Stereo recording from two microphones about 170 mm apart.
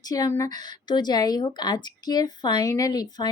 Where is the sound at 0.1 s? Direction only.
20° left (ahead or behind).